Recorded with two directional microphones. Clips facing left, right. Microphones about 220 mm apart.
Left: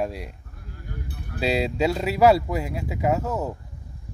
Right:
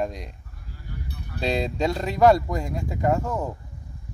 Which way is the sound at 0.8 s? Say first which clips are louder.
Left 1 dB; 50° left (ahead or behind).